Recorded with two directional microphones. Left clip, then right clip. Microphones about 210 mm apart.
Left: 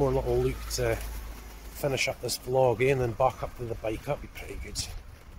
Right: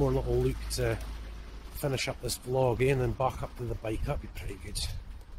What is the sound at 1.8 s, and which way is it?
Speech, centre (ahead or behind).